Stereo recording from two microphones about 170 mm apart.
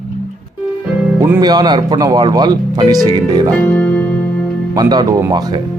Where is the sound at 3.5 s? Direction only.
10° left (ahead or behind).